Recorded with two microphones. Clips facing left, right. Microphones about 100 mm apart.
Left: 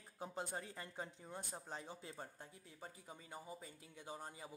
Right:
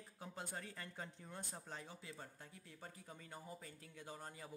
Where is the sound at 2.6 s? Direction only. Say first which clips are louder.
Even; 15° left (ahead or behind).